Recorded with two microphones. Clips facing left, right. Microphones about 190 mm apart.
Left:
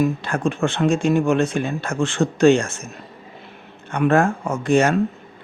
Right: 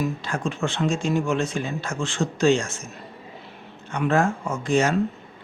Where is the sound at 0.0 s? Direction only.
55° left (ahead or behind).